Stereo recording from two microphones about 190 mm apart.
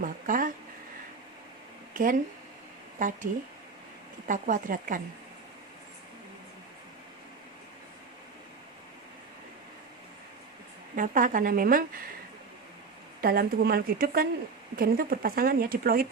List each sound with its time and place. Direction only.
0.0 s a sound: 45° right (ahead or behind)
1.9 s a sound: 45° right (ahead or behind)
3.0 s speech: 45° right (ahead or behind)
4.3 s speech: 45° right (ahead or behind)
10.9 s speech: 45° right (ahead or behind)
13.2 s speech: 50° right (ahead or behind)